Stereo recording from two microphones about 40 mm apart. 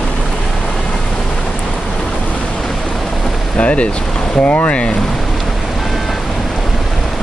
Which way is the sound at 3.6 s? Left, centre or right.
Left.